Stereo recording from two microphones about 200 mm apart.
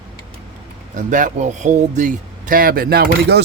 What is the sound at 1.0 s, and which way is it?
Speech, 40° right (ahead or behind).